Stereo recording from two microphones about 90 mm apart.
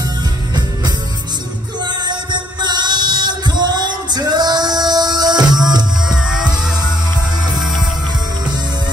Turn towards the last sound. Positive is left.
turn(degrees=-5)  # may be behind; listen again after turning